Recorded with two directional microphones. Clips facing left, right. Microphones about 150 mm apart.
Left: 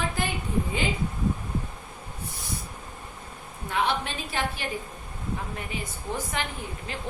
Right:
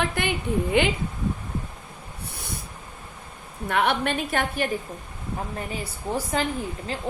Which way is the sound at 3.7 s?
60° right (ahead or behind).